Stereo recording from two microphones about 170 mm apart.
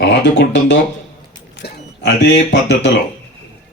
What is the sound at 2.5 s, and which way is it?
Speech, 90° left.